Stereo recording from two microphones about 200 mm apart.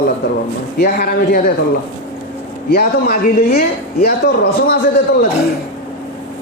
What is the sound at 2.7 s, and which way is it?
A man's voice, 50° left (ahead or behind).